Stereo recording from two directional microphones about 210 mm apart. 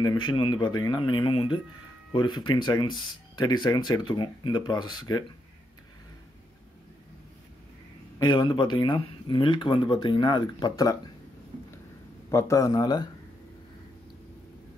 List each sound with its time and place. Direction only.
0.0 s speech: 20° left (ahead or behind)
8.2 s speech: 20° left (ahead or behind)
12.3 s speech: 15° left (ahead or behind)